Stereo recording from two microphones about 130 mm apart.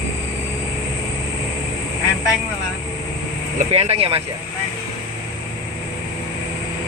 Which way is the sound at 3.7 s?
50° right (ahead or behind).